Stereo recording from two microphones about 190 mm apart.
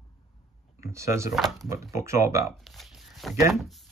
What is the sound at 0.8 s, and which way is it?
Speech, 15° right (ahead or behind).